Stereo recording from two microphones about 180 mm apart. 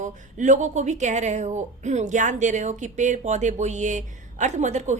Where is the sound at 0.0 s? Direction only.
45° right (ahead or behind).